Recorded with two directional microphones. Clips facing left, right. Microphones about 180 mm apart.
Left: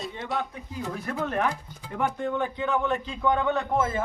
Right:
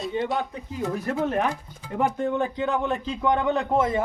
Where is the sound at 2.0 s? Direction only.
30° right (ahead or behind).